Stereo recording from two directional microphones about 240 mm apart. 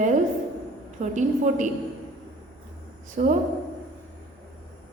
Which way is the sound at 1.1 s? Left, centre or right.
Right.